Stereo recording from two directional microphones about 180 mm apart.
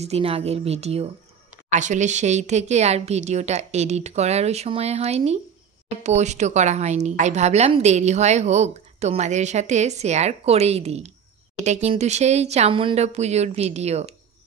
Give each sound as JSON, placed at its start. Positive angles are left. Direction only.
{"t": 0.0, "sound": "a woman's voice", "side_deg": -35}